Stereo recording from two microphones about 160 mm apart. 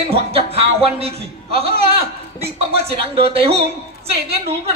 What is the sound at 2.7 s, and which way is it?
Speech, 35° right (ahead or behind).